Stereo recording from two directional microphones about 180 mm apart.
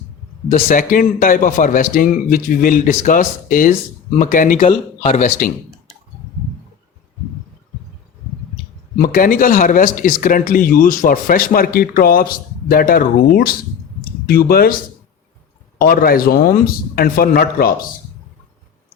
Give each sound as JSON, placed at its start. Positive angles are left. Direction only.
{"t": 0.7, "sound": "speech", "side_deg": 50}
{"t": 4.7, "sound": "speech", "side_deg": 35}
{"t": 9.0, "sound": "speech", "side_deg": 50}
{"t": 15.8, "sound": "speech", "side_deg": 55}